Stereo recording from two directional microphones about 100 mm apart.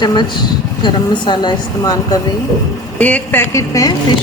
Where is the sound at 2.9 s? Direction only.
15° left (ahead or behind).